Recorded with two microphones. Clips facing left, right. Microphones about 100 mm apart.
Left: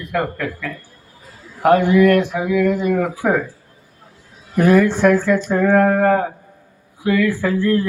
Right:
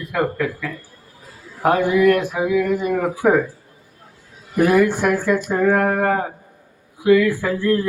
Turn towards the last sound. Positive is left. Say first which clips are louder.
# left 2 dB
turn(degrees=-15)  # may be behind; listen again after turning